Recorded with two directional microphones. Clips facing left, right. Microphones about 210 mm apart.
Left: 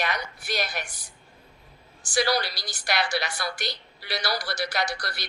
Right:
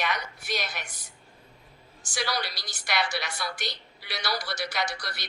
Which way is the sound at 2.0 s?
35° left (ahead or behind).